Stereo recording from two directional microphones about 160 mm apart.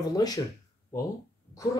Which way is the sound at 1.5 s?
20° left (ahead or behind).